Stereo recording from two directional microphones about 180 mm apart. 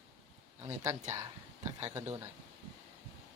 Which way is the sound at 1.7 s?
10° right (ahead or behind).